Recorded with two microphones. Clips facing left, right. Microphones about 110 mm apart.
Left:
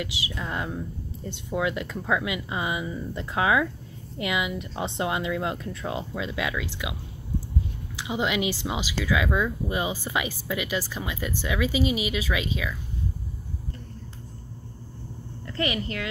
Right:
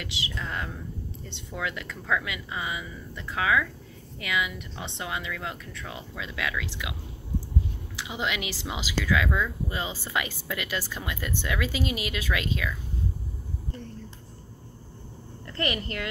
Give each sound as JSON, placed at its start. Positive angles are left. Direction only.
{"t": 0.3, "sound": "speech", "side_deg": 15}
{"t": 8.1, "sound": "speech", "side_deg": 15}
{"t": 15.4, "sound": "speech", "side_deg": 5}